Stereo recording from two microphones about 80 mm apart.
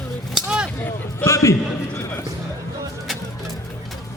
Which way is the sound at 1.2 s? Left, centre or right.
Left.